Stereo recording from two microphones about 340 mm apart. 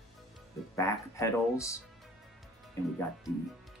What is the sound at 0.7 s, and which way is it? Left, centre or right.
Speech, centre.